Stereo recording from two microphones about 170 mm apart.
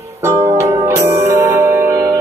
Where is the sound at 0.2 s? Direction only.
15° right (ahead or behind).